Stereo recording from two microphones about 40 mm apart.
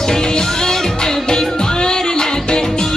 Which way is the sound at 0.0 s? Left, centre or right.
Centre.